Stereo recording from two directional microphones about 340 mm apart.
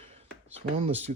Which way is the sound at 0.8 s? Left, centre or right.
Centre.